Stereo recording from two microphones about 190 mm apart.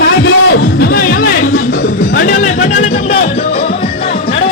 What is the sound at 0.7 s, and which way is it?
Music, 50° left (ahead or behind).